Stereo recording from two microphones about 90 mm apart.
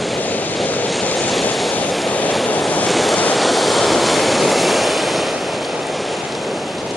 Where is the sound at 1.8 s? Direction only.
15° left (ahead or behind).